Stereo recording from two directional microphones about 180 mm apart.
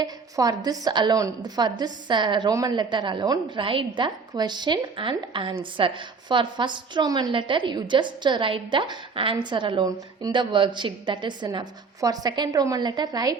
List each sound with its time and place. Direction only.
0.0 s a woman's voice: 20° right (ahead or behind)